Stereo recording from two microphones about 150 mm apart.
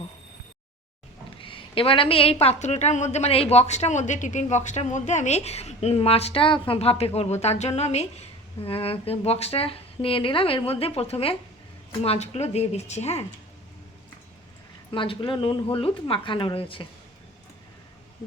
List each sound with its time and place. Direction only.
1.4 s a woman's voice: 35° left (ahead or behind)
14.8 s a woman's voice: 35° left (ahead or behind)